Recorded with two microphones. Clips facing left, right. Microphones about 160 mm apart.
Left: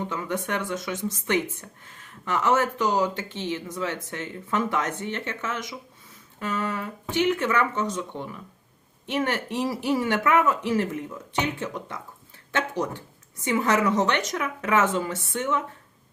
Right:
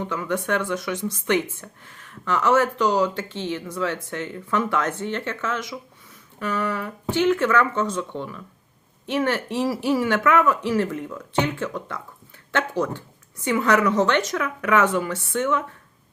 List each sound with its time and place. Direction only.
0.0 s speech: 20° left (ahead or behind)